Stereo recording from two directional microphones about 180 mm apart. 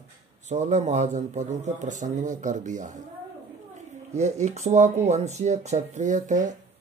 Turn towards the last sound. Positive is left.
turn(degrees=-45)  # may be behind; listen again after turning